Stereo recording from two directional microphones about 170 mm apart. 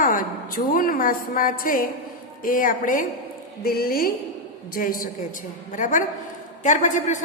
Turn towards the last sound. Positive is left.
turn(degrees=45)  # may be behind; listen again after turning